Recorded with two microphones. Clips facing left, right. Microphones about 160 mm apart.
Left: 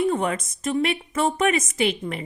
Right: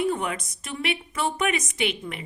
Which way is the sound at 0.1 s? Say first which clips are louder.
Left 4 dB; 40° left (ahead or behind).